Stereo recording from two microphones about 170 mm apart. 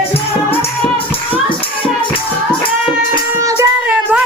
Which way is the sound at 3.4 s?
15° right (ahead or behind).